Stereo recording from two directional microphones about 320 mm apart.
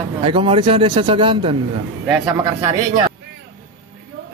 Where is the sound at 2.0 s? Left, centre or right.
Centre.